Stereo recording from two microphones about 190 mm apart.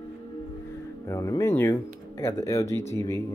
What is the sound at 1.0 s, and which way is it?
Speech, 15° left (ahead or behind).